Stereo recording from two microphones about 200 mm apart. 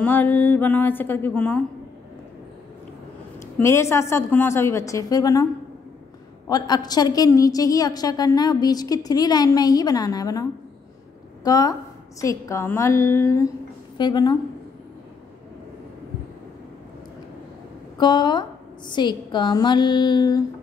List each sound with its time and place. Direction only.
0.0 s a woman's voice: 10° left (ahead or behind)
3.3 s a woman's voice: 15° left (ahead or behind)
6.5 s a woman's voice: 20° left (ahead or behind)
17.9 s a woman's voice: 20° left (ahead or behind)